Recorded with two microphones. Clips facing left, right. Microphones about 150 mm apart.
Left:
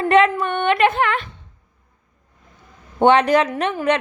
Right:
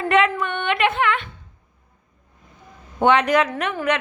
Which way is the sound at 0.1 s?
35° left (ahead or behind).